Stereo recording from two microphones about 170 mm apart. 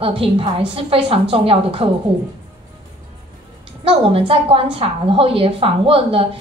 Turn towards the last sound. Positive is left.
turn(degrees=-35)  # may be behind; listen again after turning